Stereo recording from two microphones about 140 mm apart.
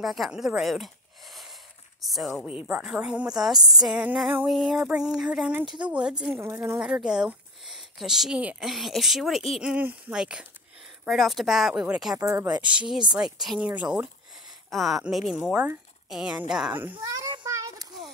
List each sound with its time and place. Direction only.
0.0 s speech: centre (ahead or behind)
3.5 s speech: 30° right (ahead or behind)
3.8 s female singing: 5° right (ahead or behind)
4.5 s speech: centre (ahead or behind)
5.9 s female singing: 5° right (ahead or behind)
6.4 s speech: 20° right (ahead or behind)
6.8 s speech: 5° right (ahead or behind)
12.4 s speech: 30° right (ahead or behind)
12.6 s female singing: 5° right (ahead or behind)
13.1 s speech: 5° right (ahead or behind)
17.0 s speech: 25° right (ahead or behind)
17.5 s children playing: 25° right (ahead or behind)